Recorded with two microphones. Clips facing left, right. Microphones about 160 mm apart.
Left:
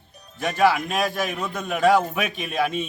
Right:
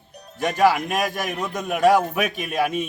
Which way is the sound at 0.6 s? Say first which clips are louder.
Right 1 dB; 15° right (ahead or behind).